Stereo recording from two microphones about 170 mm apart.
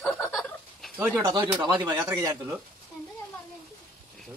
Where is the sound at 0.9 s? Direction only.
15° right (ahead or behind).